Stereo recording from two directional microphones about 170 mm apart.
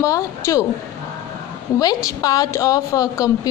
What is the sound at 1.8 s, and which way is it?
A woman's voice, 20° left (ahead or behind).